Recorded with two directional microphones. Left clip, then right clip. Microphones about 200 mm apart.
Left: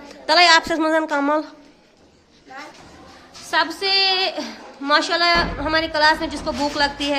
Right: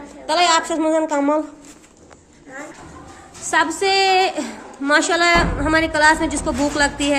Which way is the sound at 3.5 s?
Centre (ahead or behind).